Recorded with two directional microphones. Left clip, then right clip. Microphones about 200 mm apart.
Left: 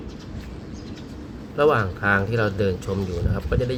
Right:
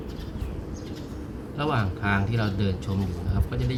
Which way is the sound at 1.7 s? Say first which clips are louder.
Left 6 dB; 35° left (ahead or behind).